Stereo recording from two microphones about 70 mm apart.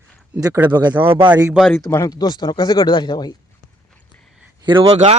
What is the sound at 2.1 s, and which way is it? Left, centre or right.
Speech, left.